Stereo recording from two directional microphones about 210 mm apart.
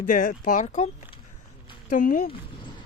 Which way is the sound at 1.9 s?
40° left (ahead or behind).